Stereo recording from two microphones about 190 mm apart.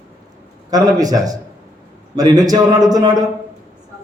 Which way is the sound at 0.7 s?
20° right (ahead or behind).